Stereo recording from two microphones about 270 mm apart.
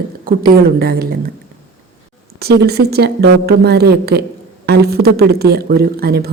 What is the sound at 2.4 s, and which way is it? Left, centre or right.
Speech, right.